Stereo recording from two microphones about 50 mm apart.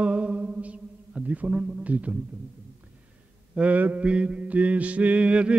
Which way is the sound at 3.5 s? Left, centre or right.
Right.